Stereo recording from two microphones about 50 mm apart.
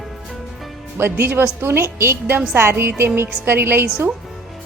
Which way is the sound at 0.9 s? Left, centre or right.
Right.